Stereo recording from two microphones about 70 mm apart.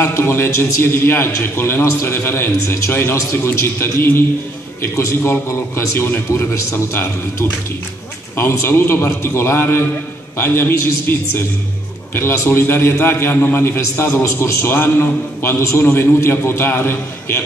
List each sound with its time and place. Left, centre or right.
0.0 s a man's voice: left